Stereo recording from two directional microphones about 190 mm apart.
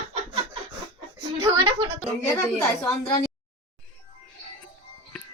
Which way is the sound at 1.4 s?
20° right (ahead or behind).